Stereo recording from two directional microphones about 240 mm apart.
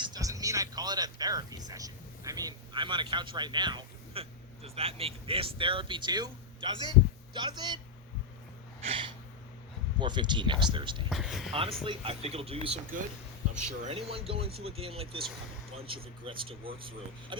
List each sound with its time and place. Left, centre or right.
0.0 s speech: centre
8.8 s a sound: right
10.0 s speech: centre
11.1 s speech: centre
11.5 s speech: right